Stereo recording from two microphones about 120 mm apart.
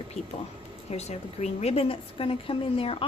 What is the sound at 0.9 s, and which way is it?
A woman's voice, 65° left (ahead or behind).